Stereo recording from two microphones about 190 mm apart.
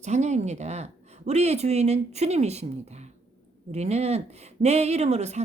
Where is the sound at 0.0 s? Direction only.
35° right (ahead or behind).